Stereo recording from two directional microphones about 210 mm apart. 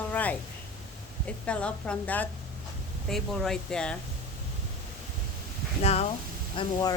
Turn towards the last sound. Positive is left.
turn(degrees=25)  # may be behind; listen again after turning